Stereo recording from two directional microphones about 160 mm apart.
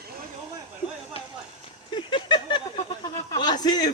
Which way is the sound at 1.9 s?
30° left (ahead or behind).